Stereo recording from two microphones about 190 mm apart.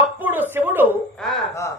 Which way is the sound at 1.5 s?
15° left (ahead or behind).